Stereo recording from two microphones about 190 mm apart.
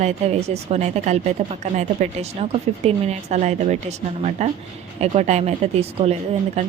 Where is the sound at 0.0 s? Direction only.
35° right (ahead or behind).